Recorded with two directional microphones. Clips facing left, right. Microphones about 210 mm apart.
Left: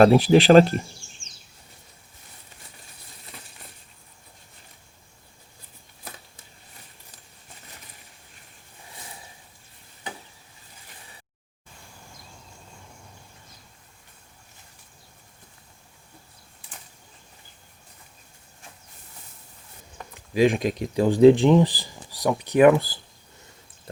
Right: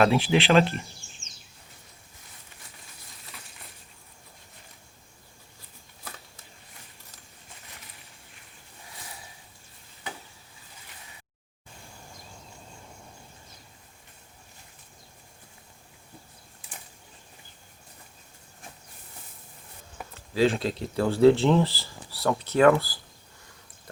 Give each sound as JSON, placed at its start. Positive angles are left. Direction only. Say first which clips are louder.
{"t": 0.0, "sound": "speech", "louder": "left 7 dB", "side_deg": 40}
{"t": 20.1, "sound": "speech", "louder": "left 3 dB", "side_deg": 15}